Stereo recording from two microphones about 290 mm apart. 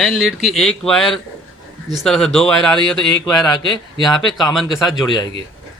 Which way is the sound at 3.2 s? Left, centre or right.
Centre.